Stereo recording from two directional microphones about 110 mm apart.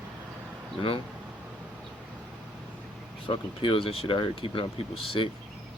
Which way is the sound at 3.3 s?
55° left (ahead or behind).